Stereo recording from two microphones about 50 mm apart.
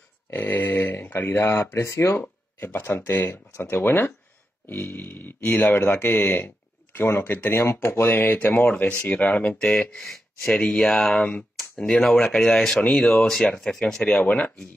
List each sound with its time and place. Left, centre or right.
0.3 s speech: left
2.6 s speech: left
3.2 s speech: left
9.6 s speech: centre
10.6 s speech: left
11.5 s speech: centre